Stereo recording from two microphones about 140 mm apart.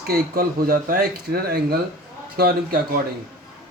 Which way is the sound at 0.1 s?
90° right.